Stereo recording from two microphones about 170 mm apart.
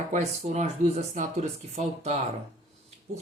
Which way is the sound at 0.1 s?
40° right (ahead or behind).